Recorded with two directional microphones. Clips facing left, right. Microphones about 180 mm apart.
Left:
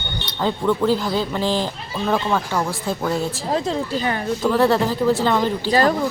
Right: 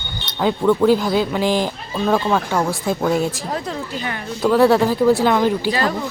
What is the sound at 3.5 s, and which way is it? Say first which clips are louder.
Speech: left 4 dB; 25° left (ahead or behind).